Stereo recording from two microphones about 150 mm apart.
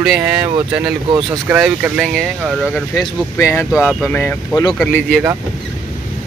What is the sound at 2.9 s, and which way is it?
Speech, 20° left (ahead or behind).